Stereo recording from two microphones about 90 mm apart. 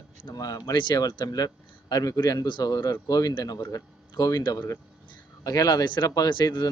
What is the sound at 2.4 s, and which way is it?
Speech, 55° left (ahead or behind).